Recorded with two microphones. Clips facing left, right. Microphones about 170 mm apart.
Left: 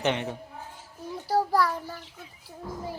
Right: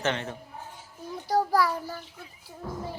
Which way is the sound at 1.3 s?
5° left (ahead or behind).